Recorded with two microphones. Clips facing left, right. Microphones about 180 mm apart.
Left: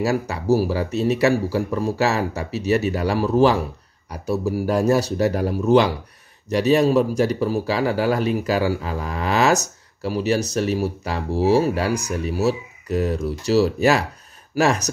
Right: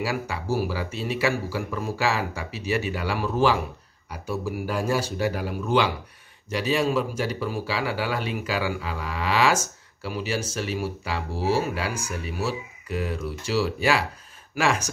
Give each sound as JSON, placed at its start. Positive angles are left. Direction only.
{"t": 0.0, "sound": "speech", "side_deg": 40}